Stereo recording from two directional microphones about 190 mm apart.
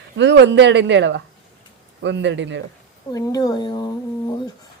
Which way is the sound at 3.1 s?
20° left (ahead or behind).